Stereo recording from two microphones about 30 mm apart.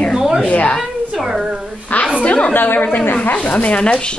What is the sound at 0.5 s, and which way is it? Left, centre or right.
Speech, left.